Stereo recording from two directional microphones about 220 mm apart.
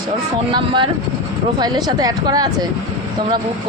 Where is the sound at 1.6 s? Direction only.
20° right (ahead or behind).